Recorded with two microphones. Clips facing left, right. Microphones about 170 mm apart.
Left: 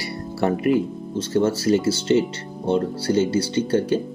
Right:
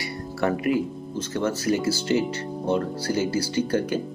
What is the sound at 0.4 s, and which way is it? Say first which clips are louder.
Speech: left 3 dB; 25° left (ahead or behind).